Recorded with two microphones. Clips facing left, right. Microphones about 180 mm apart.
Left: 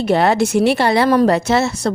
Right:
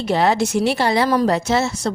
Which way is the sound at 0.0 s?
55° left (ahead or behind).